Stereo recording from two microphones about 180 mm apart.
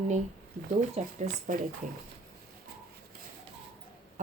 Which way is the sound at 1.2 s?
40° right (ahead or behind).